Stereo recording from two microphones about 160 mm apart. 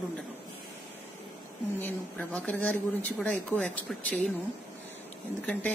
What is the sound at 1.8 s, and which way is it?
Speech, 10° left (ahead or behind).